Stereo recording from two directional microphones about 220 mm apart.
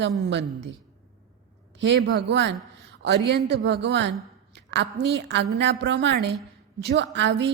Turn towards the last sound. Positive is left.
turn(degrees=-50)  # may be behind; listen again after turning